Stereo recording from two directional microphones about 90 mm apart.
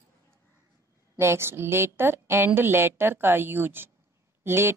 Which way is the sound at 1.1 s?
30° right (ahead or behind).